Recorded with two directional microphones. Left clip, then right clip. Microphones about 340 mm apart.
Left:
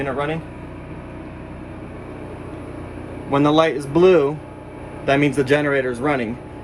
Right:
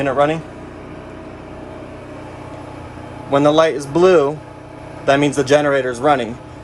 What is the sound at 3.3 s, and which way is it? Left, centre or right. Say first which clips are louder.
Speech: right 3 dB; centre.